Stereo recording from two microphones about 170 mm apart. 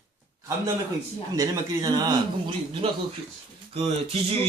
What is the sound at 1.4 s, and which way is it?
Speech, 20° right (ahead or behind).